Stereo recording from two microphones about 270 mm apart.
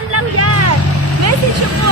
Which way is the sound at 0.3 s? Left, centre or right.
Right.